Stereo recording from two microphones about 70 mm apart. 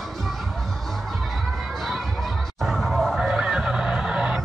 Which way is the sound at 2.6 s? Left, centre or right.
Centre.